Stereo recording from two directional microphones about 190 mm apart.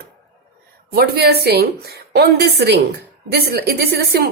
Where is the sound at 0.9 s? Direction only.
55° right (ahead or behind).